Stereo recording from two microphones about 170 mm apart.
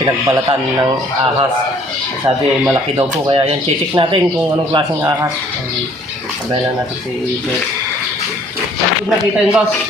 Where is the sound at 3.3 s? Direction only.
35° right (ahead or behind).